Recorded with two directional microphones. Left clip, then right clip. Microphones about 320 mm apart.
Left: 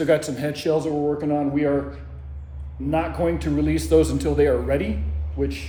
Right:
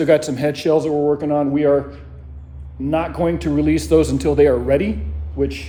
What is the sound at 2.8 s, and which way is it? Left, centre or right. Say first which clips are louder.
Speech: right 3 dB; right.